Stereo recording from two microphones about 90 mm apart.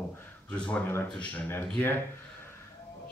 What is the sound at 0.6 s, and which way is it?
Speech, 15° left (ahead or behind).